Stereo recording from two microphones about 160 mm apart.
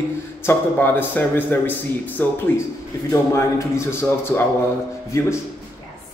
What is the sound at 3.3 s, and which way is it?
Speech, 15° left (ahead or behind).